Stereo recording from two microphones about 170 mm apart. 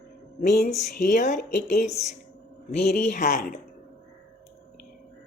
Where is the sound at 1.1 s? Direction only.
50° left (ahead or behind).